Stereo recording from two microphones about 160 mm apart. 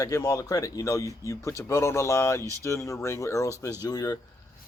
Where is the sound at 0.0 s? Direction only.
20° left (ahead or behind).